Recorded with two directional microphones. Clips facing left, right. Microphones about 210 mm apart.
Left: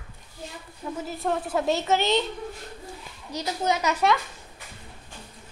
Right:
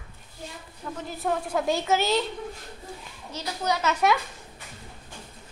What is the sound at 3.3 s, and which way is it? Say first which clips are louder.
Speech: left 2 dB; 15° left (ahead or behind).